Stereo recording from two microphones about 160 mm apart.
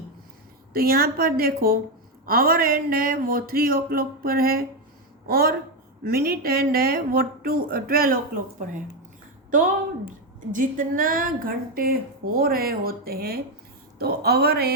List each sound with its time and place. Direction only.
0.7 s a woman's voice: 70° right (ahead or behind)